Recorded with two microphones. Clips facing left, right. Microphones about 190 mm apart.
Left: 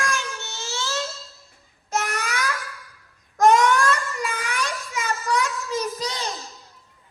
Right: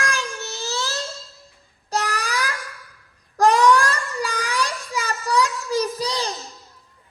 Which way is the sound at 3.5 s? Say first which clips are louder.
Right 2 dB; 35° right (ahead or behind).